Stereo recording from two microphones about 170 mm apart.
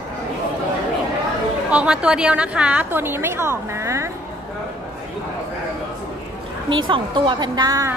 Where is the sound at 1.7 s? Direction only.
5° right (ahead or behind).